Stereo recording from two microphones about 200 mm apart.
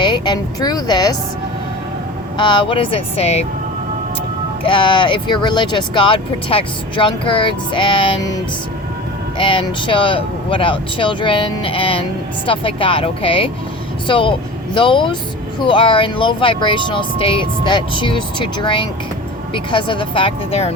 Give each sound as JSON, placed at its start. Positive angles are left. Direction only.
{"t": 0.0, "sound": "speech", "side_deg": 20}
{"t": 2.4, "sound": "speech", "side_deg": 25}
{"t": 4.6, "sound": "speech", "side_deg": 25}
{"t": 9.4, "sound": "speech", "side_deg": 25}